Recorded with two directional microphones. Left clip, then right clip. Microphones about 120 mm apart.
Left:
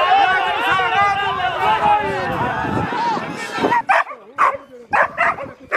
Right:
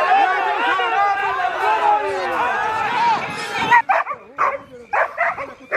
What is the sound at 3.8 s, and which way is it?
Dog, 55° left (ahead or behind).